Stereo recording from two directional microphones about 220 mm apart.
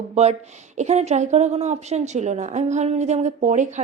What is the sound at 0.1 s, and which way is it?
A woman's voice, 30° right (ahead or behind).